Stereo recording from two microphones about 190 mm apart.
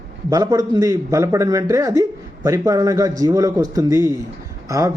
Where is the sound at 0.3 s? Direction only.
20° right (ahead or behind).